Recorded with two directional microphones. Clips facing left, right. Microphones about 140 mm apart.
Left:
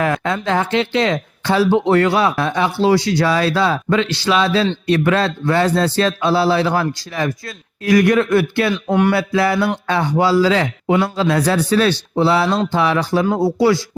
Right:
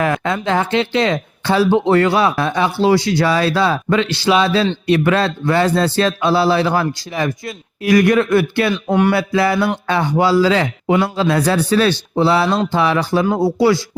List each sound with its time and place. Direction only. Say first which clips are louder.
0.0 s speech: right 1 dB; 20° right (ahead or behind)